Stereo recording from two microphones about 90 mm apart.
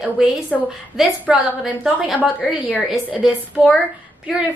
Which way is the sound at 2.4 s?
5° right (ahead or behind).